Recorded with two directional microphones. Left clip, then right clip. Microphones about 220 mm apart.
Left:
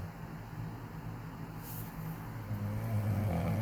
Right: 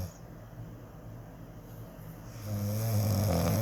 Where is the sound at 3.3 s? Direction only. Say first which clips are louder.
Right 7 dB; 50° right (ahead or behind).